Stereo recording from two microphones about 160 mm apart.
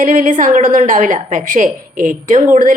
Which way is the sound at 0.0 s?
55° right (ahead or behind).